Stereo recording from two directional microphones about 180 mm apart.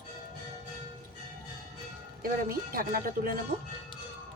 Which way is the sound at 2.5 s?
55° right (ahead or behind).